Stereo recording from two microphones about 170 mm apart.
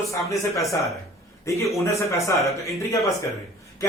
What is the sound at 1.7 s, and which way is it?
Speech, 15° left (ahead or behind).